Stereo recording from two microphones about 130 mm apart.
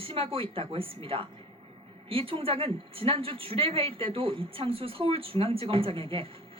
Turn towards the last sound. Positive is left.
turn(degrees=-45)  # may be behind; listen again after turning